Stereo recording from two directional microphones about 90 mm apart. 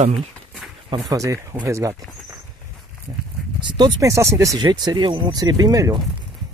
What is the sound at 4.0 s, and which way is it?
Speech, 35° right (ahead or behind).